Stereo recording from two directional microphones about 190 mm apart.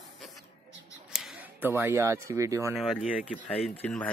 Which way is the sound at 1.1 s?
5° right (ahead or behind).